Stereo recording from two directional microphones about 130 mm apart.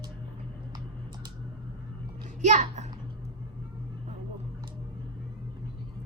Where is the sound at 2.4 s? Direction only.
65° right (ahead or behind).